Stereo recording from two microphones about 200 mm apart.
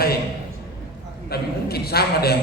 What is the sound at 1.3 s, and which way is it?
A man's voice, 50° left (ahead or behind).